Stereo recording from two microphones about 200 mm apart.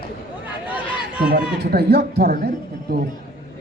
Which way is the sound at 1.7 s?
50° right (ahead or behind).